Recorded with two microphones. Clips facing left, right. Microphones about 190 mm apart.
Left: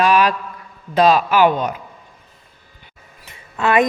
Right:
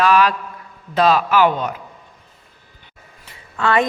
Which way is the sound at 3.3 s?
20° left (ahead or behind).